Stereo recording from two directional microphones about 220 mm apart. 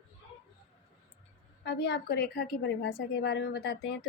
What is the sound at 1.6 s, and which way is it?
A woman's voice, 50° left (ahead or behind).